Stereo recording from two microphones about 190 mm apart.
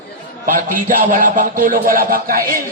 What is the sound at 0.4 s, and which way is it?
A man's voice, 45° right (ahead or behind).